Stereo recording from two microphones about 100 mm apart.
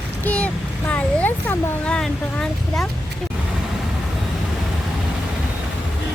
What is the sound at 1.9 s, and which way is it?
Speech, 5° left (ahead or behind).